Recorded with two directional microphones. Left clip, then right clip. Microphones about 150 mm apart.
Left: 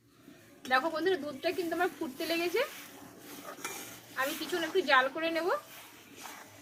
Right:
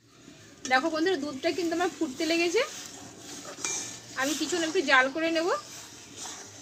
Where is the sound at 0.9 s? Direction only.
30° right (ahead or behind).